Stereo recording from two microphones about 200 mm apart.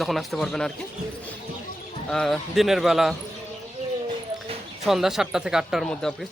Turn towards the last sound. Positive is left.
turn(degrees=0)  # may be behind; listen again after turning